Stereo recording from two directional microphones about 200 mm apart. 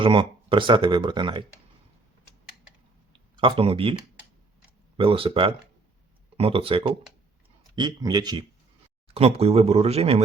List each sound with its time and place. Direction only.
0.0 s speech: 25° right (ahead or behind)
3.1 s a sound: 25° right (ahead or behind)
4.9 s speech: 25° right (ahead or behind)
9.1 s speech: 30° right (ahead or behind)